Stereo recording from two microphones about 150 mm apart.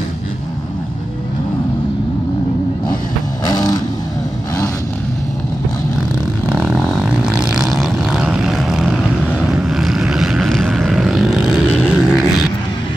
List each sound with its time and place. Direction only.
3.4 s vehicle: 25° left (ahead or behind)
6.5 s vehicle: 10° right (ahead or behind)